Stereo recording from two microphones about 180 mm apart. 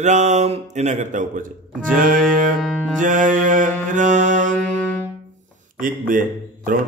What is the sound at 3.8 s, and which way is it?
Mantra, 45° right (ahead or behind).